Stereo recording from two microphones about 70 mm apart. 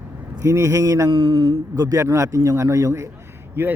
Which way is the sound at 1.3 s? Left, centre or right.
Right.